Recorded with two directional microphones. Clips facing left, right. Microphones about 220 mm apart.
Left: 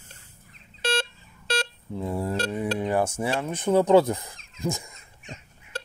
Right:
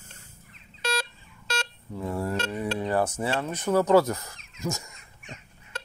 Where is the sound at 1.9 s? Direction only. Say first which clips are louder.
Left 1 dB; 20° left (ahead or behind).